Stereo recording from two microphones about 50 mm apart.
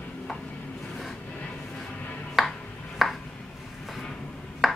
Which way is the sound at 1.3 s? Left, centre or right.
Left.